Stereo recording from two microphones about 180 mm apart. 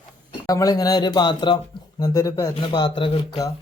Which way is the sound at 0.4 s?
20° left (ahead or behind).